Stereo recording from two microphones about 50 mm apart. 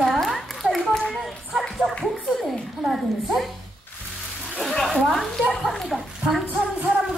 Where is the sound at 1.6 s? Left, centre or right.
Centre.